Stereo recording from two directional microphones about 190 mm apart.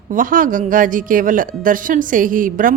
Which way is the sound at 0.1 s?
45° right (ahead or behind).